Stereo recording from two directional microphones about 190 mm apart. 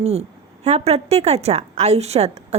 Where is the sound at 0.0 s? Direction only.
35° right (ahead or behind).